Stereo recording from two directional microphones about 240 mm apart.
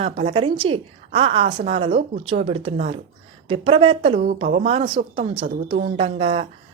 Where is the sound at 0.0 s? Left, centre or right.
Right.